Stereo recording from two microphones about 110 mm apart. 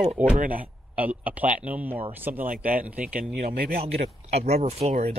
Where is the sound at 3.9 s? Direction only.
70° right (ahead or behind).